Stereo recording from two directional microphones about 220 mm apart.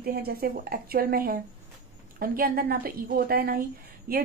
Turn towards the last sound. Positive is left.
turn(degrees=-45)  # may be behind; listen again after turning